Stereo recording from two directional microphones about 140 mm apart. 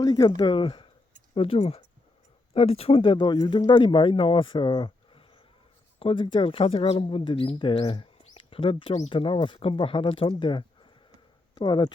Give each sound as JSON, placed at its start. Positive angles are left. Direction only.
{"t": 0.0, "sound": "speech", "side_deg": 30}